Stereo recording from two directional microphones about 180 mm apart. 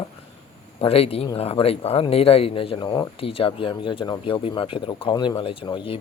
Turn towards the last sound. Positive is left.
turn(degrees=30)  # may be behind; listen again after turning